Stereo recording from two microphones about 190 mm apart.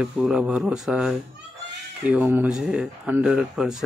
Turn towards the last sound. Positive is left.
turn(degrees=-5)  # may be behind; listen again after turning